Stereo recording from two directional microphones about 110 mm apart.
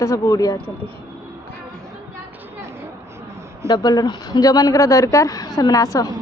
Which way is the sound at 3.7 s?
40° left (ahead or behind).